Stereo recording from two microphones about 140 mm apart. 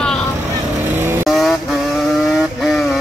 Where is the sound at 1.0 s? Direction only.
15° right (ahead or behind).